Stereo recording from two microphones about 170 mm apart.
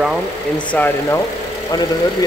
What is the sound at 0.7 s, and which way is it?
Speech, 15° left (ahead or behind).